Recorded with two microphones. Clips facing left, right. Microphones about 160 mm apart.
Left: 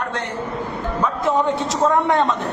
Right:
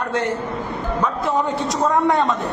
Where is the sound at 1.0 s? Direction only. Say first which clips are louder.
Left 3 dB; centre (ahead or behind).